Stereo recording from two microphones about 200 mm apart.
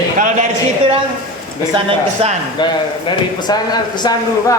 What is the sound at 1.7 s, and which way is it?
Speech, 30° right (ahead or behind).